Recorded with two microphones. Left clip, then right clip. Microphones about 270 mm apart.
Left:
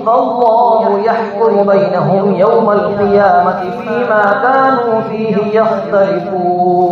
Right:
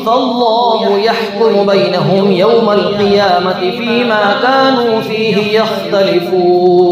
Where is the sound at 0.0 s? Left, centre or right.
Right.